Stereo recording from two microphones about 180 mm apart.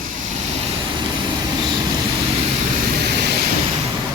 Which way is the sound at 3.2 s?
65° right (ahead or behind).